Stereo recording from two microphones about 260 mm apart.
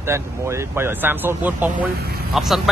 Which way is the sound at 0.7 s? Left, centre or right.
Centre.